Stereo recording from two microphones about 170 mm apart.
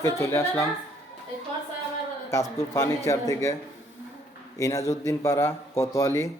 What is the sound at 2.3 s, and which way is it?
A man's voice, 15° left (ahead or behind).